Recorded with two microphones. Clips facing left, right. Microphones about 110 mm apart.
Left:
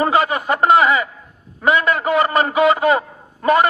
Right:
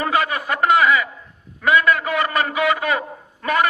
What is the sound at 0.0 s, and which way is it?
A man's voice, 30° left (ahead or behind).